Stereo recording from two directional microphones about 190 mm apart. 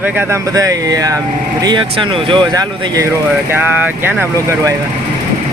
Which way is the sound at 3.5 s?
10° right (ahead or behind).